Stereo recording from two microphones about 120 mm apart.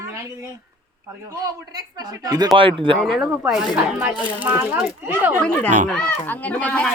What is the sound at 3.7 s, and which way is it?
Speech, 15° right (ahead or behind).